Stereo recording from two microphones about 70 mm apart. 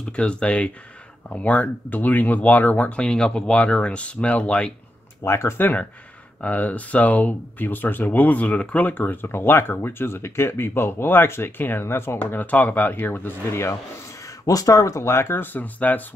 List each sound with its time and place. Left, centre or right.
0.1 s speech: centre
5.2 s speech: left
6.4 s speech: left
14.4 s speech: left